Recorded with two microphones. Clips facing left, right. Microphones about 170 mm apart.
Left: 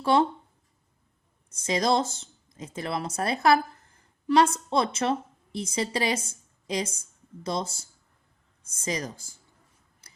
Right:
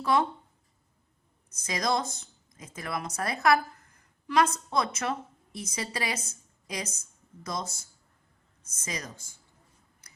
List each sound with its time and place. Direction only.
0.0 s a woman's voice: 30° left (ahead or behind)
1.6 s a woman's voice: 30° left (ahead or behind)